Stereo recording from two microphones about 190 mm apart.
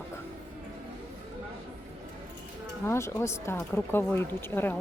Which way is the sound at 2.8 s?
15° left (ahead or behind).